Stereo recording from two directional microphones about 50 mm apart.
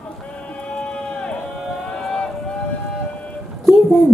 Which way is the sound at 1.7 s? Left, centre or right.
Centre.